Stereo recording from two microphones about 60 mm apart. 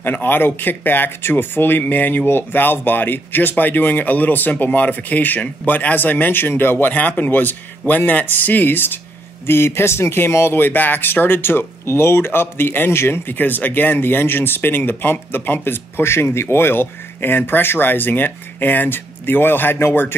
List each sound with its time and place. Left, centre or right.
0.0 s speech: left